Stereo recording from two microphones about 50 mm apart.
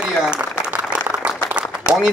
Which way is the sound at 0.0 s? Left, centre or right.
Centre.